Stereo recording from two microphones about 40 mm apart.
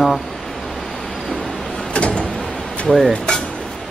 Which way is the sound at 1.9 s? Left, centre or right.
Left.